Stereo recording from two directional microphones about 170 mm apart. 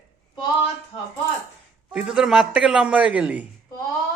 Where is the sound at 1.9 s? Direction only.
5° right (ahead or behind).